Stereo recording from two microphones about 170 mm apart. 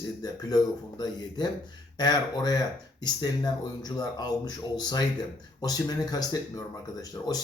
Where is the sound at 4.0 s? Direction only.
25° left (ahead or behind).